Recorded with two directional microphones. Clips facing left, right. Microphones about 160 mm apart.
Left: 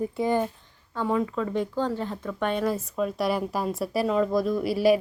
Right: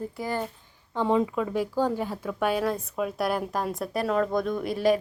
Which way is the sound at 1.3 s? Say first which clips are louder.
Right 1 dB; 5° right (ahead or behind).